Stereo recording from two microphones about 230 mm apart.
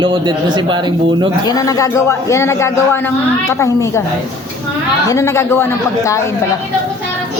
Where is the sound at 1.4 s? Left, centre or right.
Centre.